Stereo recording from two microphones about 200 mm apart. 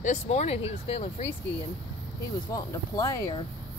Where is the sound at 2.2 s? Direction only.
15° left (ahead or behind).